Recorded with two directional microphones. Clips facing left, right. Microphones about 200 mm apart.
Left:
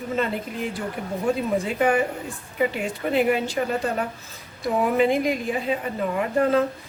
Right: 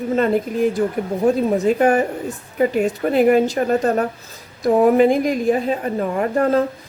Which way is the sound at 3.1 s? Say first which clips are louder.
Right 6 dB; 45° right (ahead or behind).